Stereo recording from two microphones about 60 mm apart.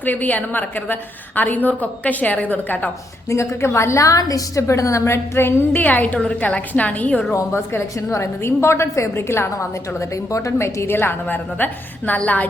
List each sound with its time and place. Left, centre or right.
0.0 s a woman's voice: left
3.2 s a woman's voice: left
4.6 s a woman's voice: left
5.7 s a woman's voice: left
7.3 s a woman's voice: left
10.8 s a woman's voice: left